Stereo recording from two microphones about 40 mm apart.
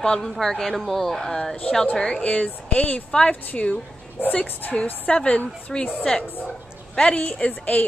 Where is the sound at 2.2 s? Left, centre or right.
Left.